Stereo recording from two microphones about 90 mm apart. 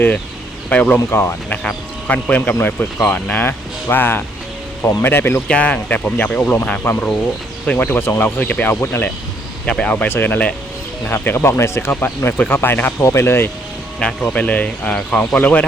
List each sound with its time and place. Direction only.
0.7 s speech: 15° left (ahead or behind)
0.9 s speech: 25° left (ahead or behind)
1.6 s speech: 5° left (ahead or behind)
2.5 s speech: 15° left (ahead or behind)
5.5 s speech: 10° left (ahead or behind)
6.8 s speech: 25° left (ahead or behind)
9.6 s speech: 10° left (ahead or behind); by 13.5 s 25° left (ahead or behind)
14.0 s speech: 5° left (ahead or behind)
14.3 s speech: 15° left (ahead or behind)